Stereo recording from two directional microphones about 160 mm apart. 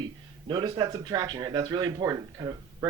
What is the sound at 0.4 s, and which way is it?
Speech, 30° right (ahead or behind).